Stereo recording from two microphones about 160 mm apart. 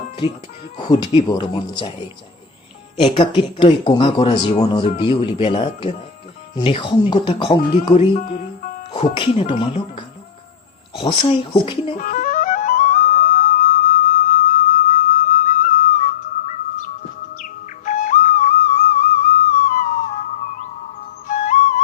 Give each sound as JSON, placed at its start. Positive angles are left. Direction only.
{"t": 1.3, "sound": "speech", "side_deg": 30}
{"t": 3.0, "sound": "speech", "side_deg": 30}
{"t": 7.9, "sound": "speech", "side_deg": 50}
{"t": 8.9, "sound": "speech", "side_deg": 30}
{"t": 11.9, "sound": "flute", "side_deg": 55}
{"t": 15.3, "sound": "music", "side_deg": 55}
{"t": 16.5, "sound": "bird", "side_deg": 55}
{"t": 17.3, "sound": "music", "side_deg": 55}